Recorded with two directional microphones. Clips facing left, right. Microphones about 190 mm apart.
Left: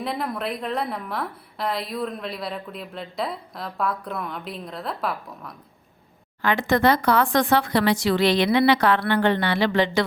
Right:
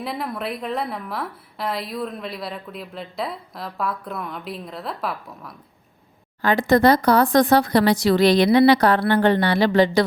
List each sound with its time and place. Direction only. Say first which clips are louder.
0.0 s a woman's voice: even; centre (ahead or behind)
6.4 s speech: right 4 dB; 35° right (ahead or behind)